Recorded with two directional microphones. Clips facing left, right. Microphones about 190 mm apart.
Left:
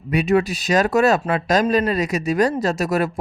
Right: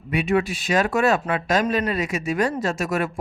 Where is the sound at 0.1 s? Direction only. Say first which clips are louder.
Left 3 dB; 40° left (ahead or behind).